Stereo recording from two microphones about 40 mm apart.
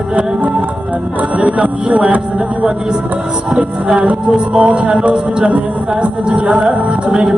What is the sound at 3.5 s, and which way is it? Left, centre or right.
Music, right.